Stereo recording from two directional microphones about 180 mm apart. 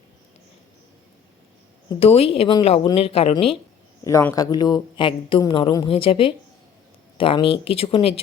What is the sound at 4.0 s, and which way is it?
Speech, 15° left (ahead or behind).